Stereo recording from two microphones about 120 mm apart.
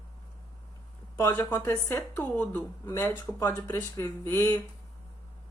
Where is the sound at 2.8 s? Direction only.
20° left (ahead or behind).